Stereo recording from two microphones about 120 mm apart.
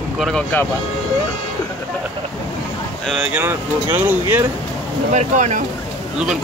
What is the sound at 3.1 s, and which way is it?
Speech, 5° right (ahead or behind).